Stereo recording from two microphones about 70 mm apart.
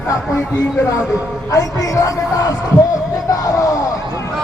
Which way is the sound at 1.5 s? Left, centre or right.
Left.